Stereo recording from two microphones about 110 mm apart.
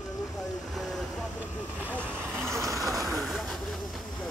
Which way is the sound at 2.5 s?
30° right (ahead or behind).